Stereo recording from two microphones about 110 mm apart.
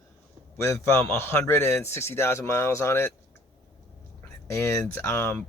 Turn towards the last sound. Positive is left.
turn(degrees=25)  # may be behind; listen again after turning